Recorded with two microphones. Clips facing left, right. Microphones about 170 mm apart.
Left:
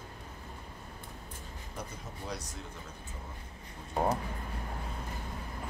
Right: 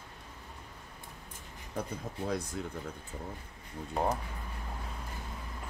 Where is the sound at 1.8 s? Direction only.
55° right (ahead or behind).